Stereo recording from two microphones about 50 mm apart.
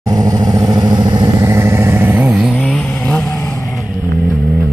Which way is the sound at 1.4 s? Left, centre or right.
Right.